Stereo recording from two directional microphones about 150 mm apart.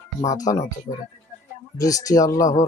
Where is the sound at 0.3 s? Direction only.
25° left (ahead or behind).